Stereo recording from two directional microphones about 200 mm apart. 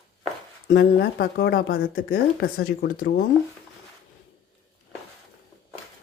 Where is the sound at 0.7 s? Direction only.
55° left (ahead or behind).